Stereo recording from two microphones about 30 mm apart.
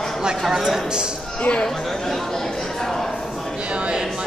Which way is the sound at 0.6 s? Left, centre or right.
Centre.